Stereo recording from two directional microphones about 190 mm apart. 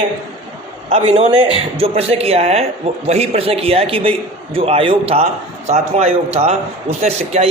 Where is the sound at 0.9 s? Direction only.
30° right (ahead or behind).